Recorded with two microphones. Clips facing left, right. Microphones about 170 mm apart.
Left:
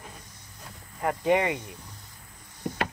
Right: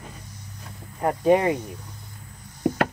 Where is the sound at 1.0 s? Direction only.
35° right (ahead or behind).